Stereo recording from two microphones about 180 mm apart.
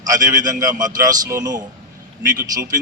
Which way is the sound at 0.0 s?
20° right (ahead or behind).